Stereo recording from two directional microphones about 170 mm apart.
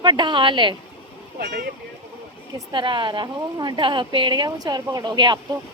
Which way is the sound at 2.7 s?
30° right (ahead or behind).